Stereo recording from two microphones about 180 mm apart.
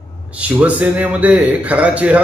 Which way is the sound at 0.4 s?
10° right (ahead or behind).